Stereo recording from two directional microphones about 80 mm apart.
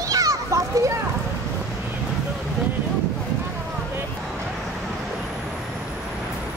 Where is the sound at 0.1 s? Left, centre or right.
Right.